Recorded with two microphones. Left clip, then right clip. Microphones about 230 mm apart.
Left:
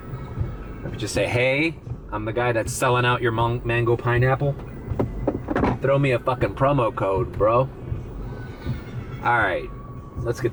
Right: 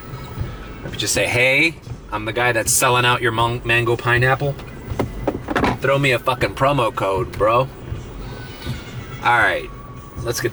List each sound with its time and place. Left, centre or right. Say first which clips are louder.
0.9 s speech: right 5 dB; centre
9.2 s speech: right 5 dB; centre